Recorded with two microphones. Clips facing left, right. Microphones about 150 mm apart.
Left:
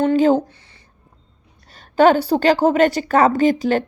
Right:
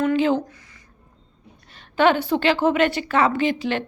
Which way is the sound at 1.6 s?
40° left (ahead or behind).